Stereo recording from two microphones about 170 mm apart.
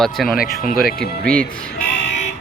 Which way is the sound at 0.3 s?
60° left (ahead or behind).